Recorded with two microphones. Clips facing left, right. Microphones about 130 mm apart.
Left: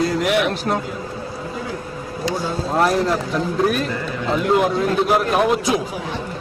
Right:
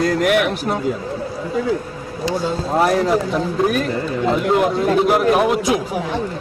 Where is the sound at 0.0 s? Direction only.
60° right (ahead or behind).